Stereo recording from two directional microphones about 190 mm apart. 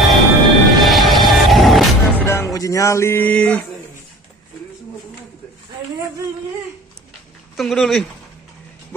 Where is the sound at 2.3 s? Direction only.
15° left (ahead or behind).